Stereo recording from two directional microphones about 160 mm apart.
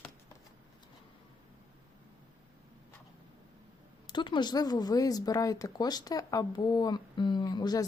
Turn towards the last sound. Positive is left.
turn(degrees=25)  # may be behind; listen again after turning